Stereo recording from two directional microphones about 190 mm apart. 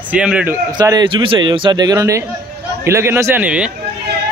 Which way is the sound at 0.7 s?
20° right (ahead or behind).